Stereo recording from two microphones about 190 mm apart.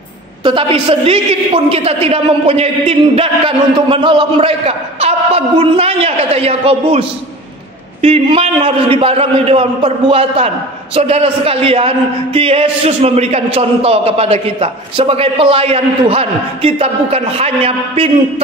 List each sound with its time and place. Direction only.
0.4 s a man's voice: 25° right (ahead or behind)